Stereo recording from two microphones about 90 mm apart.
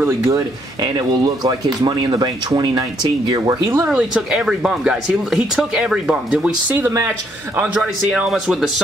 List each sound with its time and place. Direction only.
0.8 s speech: 50° right (ahead or behind)
4.1 s speech: 10° right (ahead or behind)
6.3 s speech: 20° right (ahead or behind); by 8.8 s 5° right (ahead or behind)